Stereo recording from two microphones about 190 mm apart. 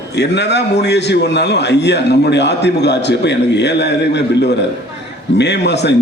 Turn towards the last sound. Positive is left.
turn(degrees=65)  # may be behind; listen again after turning